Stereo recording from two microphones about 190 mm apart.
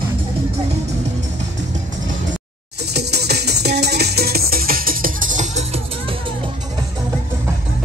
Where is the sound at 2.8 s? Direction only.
60° right (ahead or behind); by 6.3 s 30° right (ahead or behind).